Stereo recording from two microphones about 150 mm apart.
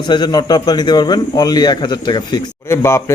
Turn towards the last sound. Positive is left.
turn(degrees=20)  # may be behind; listen again after turning